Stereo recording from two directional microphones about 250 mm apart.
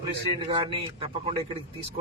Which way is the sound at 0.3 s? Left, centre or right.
Right.